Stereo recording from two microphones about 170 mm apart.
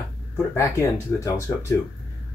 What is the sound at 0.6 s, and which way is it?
Speech, 15° left (ahead or behind).